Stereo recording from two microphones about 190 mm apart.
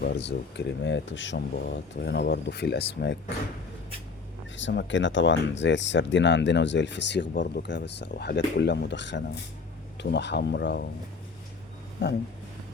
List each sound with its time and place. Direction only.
0.0 s speech: 65° left (ahead or behind)
4.5 s speech: 70° left (ahead or behind)
12.0 s speech: 60° left (ahead or behind)